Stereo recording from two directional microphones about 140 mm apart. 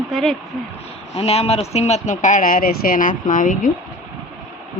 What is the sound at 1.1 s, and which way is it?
Speech, 45° left (ahead or behind).